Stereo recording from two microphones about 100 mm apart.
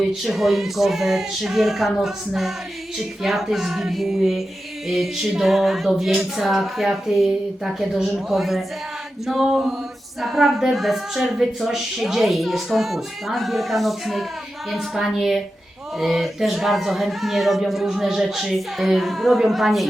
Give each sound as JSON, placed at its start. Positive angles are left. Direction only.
{"t": 0.0, "sound": "a woman's voice", "side_deg": -5}